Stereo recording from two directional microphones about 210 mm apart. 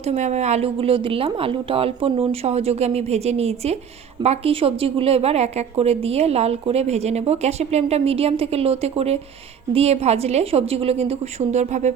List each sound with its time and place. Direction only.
0.0 s a woman's voice: 30° right (ahead or behind)